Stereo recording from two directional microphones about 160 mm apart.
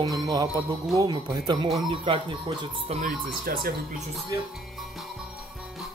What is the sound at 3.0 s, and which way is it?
Speech, 65° right (ahead or behind).